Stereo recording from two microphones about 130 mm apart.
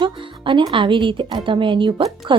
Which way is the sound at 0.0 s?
40° right (ahead or behind).